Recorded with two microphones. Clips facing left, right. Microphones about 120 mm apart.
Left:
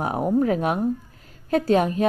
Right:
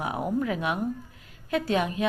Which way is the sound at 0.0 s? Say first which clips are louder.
Left 6 dB; 40° left (ahead or behind).